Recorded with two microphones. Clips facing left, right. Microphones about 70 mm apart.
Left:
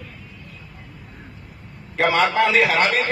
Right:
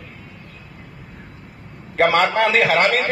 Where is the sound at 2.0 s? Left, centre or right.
Right.